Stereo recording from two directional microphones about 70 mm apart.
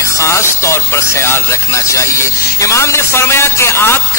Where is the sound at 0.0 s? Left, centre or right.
Left.